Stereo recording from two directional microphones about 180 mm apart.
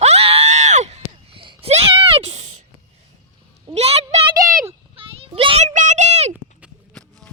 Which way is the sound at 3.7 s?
35° right (ahead or behind).